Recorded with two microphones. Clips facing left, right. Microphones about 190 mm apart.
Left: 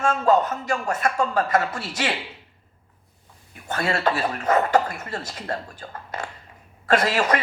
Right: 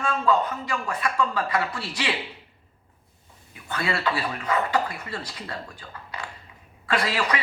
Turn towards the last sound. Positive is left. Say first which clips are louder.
# left 5 dB
turn(degrees=45)  # may be behind; listen again after turning